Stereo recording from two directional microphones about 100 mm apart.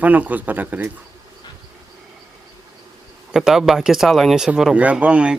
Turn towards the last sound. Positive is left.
turn(degrees=-10)  # may be behind; listen again after turning